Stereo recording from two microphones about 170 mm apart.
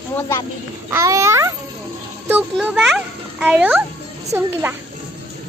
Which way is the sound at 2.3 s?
5° right (ahead or behind).